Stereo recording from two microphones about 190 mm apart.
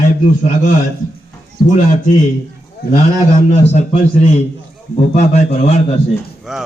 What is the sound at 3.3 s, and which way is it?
A man's voice, 35° left (ahead or behind).